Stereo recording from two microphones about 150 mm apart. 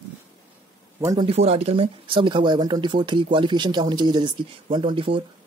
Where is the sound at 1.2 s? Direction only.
45° right (ahead or behind).